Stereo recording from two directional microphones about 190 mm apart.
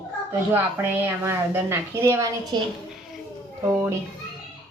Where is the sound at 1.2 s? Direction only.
15° right (ahead or behind).